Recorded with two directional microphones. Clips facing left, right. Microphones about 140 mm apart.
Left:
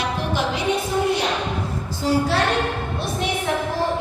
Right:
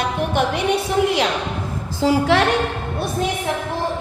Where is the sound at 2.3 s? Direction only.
90° right.